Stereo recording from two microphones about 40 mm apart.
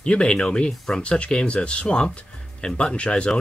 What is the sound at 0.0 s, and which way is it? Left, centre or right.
Speech, left.